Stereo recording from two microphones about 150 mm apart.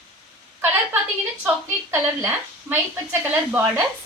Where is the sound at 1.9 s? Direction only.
15° right (ahead or behind).